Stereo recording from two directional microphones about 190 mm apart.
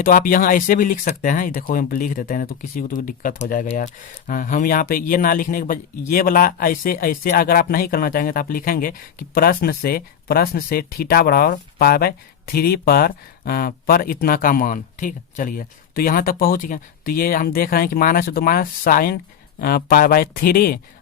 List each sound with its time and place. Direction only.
0.0 s speech: 45° left (ahead or behind)